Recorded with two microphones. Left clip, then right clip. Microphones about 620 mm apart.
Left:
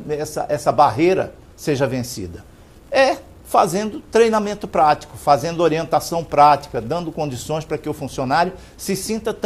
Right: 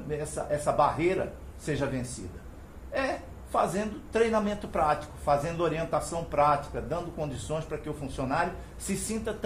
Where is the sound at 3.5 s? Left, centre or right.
Left.